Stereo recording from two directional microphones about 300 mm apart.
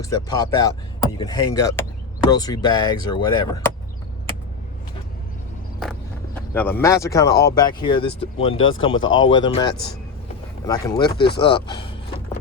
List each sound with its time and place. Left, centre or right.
0.0 s speech: centre
6.5 s speech: centre
8.5 s speech: left
9.3 s speech: centre